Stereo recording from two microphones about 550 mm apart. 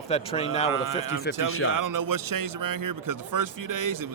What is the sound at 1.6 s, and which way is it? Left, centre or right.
Speech, right.